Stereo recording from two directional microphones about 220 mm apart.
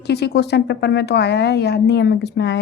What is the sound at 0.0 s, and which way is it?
A woman's voice, 50° left (ahead or behind).